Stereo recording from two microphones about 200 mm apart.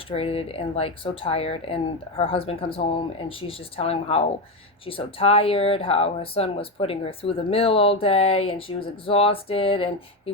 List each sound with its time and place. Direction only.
0.1 s speech: 30° left (ahead or behind)